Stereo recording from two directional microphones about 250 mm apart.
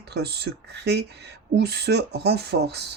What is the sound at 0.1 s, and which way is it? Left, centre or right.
Speech, right.